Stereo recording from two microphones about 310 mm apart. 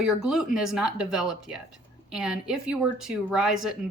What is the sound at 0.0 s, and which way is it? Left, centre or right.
Speech, centre.